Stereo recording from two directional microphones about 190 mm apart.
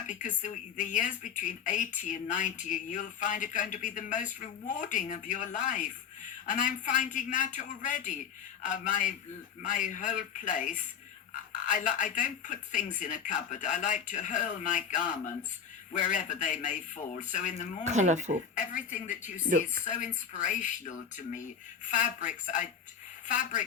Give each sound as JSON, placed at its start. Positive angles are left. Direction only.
{"t": 0.1, "sound": "a woman's voice", "side_deg": 40}
{"t": 17.8, "sound": "speech", "side_deg": -40}
{"t": 18.6, "sound": "a woman's voice", "side_deg": 40}
{"t": 19.5, "sound": "speech", "side_deg": -45}
{"t": 19.8, "sound": "a woman's voice", "side_deg": 40}